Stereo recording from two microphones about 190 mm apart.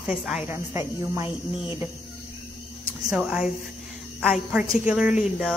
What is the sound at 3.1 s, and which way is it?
A woman's voice, 5° right (ahead or behind).